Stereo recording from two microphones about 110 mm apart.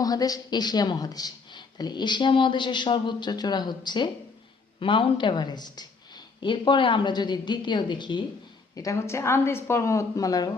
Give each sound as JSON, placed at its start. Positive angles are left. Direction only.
{"t": 0.0, "sound": "a woman's voice", "side_deg": 35}
{"t": 8.7, "sound": "a woman's voice", "side_deg": 30}